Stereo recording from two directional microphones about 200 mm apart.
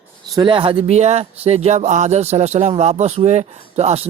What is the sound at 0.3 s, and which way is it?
Speech, 25° right (ahead or behind).